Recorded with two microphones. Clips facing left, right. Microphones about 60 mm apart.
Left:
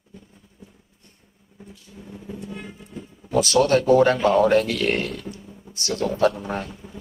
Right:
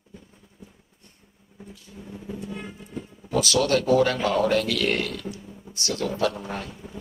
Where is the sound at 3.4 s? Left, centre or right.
Left.